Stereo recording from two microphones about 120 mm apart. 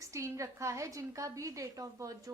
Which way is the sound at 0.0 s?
25° right (ahead or behind).